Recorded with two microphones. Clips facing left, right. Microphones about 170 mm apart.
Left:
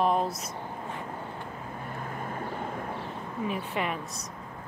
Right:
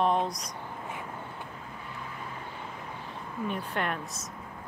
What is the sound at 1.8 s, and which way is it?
Vehicle, 50° left (ahead or behind).